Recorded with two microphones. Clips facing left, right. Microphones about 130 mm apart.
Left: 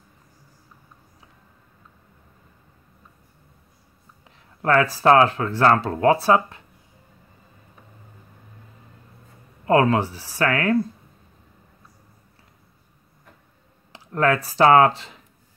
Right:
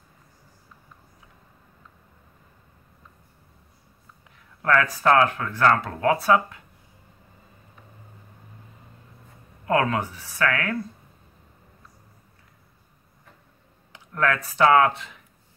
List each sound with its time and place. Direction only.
4.6 s speech: 30° left (ahead or behind)
9.7 s speech: 30° left (ahead or behind)
13.9 s speech: 30° left (ahead or behind)